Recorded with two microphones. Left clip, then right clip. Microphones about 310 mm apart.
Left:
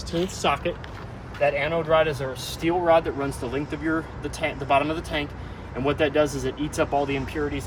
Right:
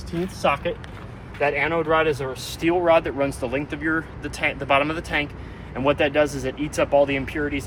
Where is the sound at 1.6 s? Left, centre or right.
Centre.